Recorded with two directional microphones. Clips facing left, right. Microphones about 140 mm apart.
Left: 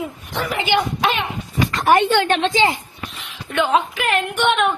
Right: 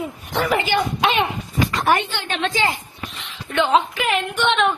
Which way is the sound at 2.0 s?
60° left (ahead or behind).